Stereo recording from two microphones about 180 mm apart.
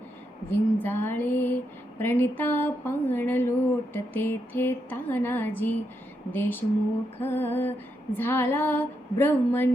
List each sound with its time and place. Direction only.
0.5 s female singing: 10° left (ahead or behind)